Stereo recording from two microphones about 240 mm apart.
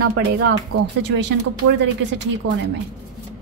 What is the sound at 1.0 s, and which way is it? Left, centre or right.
Speech, right.